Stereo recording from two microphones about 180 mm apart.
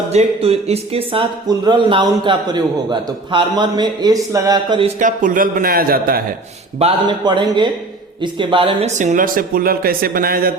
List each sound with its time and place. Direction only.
0.1 s speech: 35° right (ahead or behind)
4.9 s speech: 45° right (ahead or behind)
6.7 s speech: 30° right (ahead or behind)
9.0 s speech: 45° right (ahead or behind)